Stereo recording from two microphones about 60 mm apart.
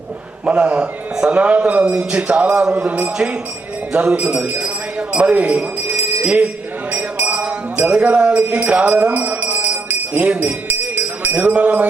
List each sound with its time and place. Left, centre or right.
0.4 s a man's voice: centre
3.9 s a sound: right
9.9 s music: right